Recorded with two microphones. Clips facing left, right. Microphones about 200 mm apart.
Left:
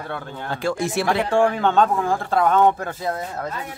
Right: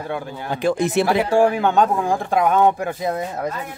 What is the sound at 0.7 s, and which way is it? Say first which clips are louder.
Speech: right 5 dB; 20° right (ahead or behind).